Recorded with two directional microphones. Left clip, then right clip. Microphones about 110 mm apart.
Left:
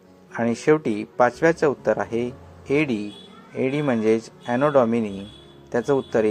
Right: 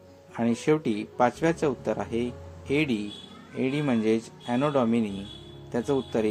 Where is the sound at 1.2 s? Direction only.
15° left (ahead or behind).